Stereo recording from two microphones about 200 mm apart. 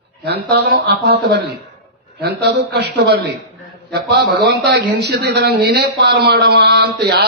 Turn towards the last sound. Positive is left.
turn(degrees=-55)  # may be behind; listen again after turning